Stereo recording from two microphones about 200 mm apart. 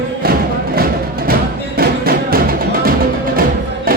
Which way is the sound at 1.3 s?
50° right (ahead or behind).